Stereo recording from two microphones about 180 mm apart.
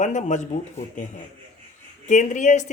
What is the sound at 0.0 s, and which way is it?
Speech, 45° left (ahead or behind).